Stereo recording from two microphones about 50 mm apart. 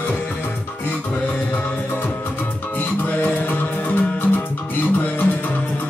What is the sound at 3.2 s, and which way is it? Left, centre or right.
Music, left.